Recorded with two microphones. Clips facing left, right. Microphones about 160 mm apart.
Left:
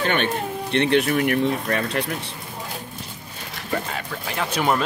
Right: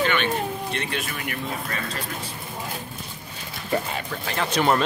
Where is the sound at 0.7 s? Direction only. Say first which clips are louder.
Left 11 dB; 65° left (ahead or behind).